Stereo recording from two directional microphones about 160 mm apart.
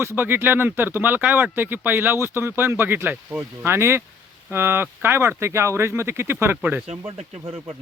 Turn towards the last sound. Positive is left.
turn(degrees=-10)  # may be behind; listen again after turning